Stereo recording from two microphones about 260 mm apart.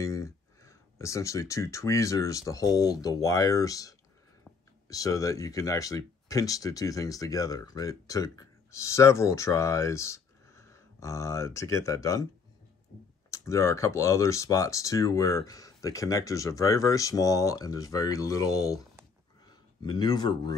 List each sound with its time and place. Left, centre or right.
0.0 s speech: centre
13.3 s speech: centre
19.8 s speech: centre